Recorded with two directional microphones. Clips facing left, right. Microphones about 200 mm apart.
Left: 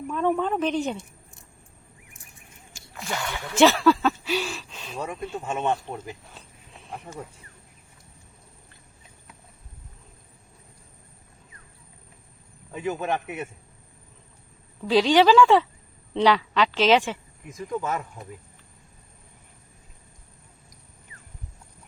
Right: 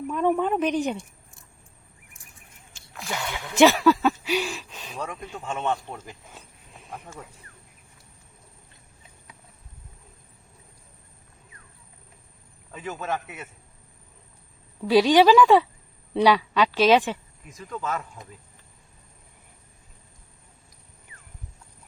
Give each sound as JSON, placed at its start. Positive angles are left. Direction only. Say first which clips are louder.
{"t": 0.1, "sound": "speech", "louder": "right 1 dB", "side_deg": -10}
{"t": 2.7, "sound": "a sound", "louder": "left 1 dB", "side_deg": 0}
{"t": 3.2, "sound": "speech", "louder": "right 1 dB", "side_deg": -15}
{"t": 4.9, "sound": "speech", "louder": "left 3 dB", "side_deg": 10}
{"t": 12.7, "sound": "speech", "louder": "left 4 dB", "side_deg": 15}
{"t": 14.8, "sound": "speech", "louder": "right 1 dB", "side_deg": -10}
{"t": 17.6, "sound": "speech", "louder": "left 3 dB", "side_deg": 15}